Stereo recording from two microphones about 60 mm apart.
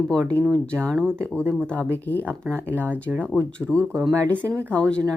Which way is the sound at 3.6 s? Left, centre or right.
Centre.